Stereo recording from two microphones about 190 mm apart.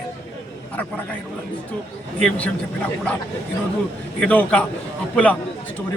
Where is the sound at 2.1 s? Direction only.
5° left (ahead or behind).